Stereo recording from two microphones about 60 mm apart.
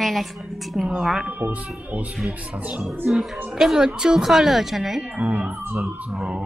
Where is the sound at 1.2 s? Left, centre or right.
Right.